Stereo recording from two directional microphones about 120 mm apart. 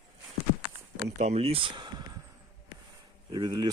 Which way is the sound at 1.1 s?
65° right (ahead or behind).